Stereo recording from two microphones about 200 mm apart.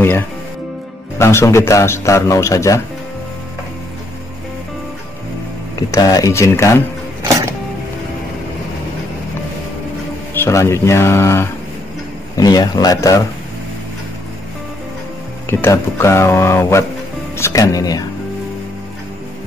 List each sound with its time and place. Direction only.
1.1 s a man's voice: 15° left (ahead or behind)
5.9 s a man's voice: 20° left (ahead or behind)
10.3 s a man's voice: 10° left (ahead or behind)
15.6 s a man's voice: 15° left (ahead or behind)